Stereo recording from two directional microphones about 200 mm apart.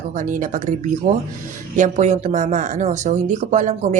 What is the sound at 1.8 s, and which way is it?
Speech, 35° right (ahead or behind).